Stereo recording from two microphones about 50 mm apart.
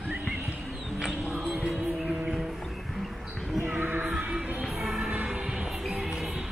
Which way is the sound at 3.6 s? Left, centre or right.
Right.